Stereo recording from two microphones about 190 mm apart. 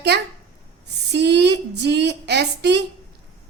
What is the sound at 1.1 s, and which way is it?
A woman's voice, 60° right (ahead or behind).